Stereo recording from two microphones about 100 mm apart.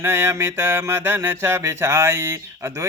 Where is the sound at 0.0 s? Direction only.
25° right (ahead or behind).